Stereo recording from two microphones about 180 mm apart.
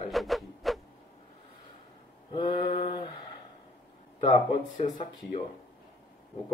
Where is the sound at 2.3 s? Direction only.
25° left (ahead or behind).